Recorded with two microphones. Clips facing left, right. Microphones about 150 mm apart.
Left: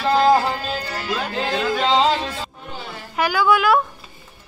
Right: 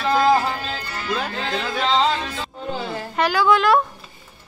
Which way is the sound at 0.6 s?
35° left (ahead or behind).